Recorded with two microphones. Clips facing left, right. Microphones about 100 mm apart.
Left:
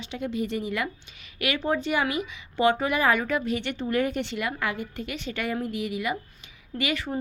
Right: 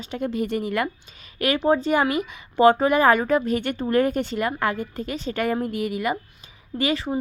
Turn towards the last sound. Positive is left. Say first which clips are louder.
# right 5 dB
turn(degrees=-35)  # may be behind; listen again after turning